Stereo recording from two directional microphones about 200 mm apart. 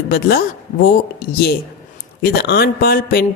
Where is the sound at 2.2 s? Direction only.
50° left (ahead or behind).